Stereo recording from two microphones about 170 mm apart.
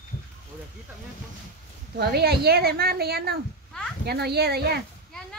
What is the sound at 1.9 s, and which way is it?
Speech, 70° right (ahead or behind).